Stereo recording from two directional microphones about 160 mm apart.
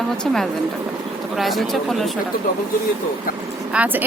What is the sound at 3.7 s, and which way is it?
Speech, 10° right (ahead or behind).